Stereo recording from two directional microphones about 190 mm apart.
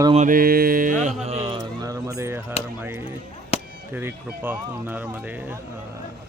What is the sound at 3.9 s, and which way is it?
Speech, 10° right (ahead or behind).